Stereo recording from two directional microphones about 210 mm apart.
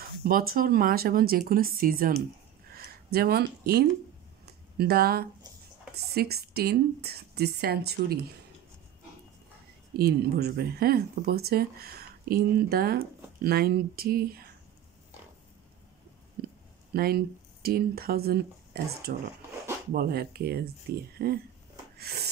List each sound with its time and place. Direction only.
0.0 s speech: 45° right (ahead or behind)
9.9 s speech: 50° right (ahead or behind)
16.4 s a sound: 50° right (ahead or behind)
16.9 s speech: 45° right (ahead or behind)
21.9 s snort: 50° right (ahead or behind)